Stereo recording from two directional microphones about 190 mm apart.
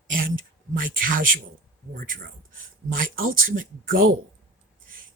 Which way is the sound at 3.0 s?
45° right (ahead or behind).